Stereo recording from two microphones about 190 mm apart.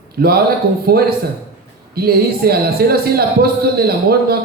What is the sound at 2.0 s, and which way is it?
A man's voice, 55° right (ahead or behind).